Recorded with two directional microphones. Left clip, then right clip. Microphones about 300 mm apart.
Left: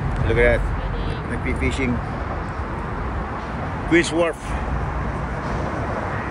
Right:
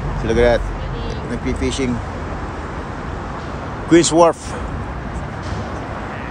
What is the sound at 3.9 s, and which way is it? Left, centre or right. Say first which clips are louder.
Speech: right 7 dB; centre.